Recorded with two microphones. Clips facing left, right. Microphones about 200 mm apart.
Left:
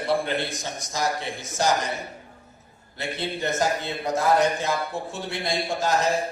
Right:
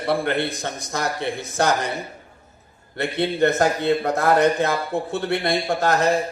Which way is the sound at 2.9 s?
60° right (ahead or behind).